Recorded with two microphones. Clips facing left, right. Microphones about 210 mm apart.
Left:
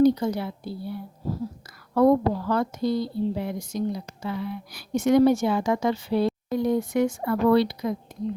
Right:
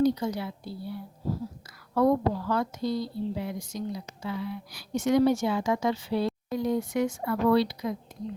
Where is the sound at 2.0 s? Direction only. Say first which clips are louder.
Left 4 dB; 50° left (ahead or behind).